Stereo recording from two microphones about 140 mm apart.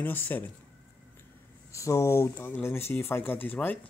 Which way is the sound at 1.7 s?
20° left (ahead or behind).